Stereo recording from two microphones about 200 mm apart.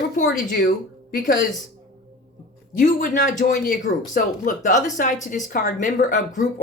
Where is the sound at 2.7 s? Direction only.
40° left (ahead or behind).